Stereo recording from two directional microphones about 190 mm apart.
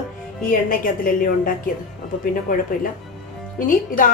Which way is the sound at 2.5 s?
50° left (ahead or behind).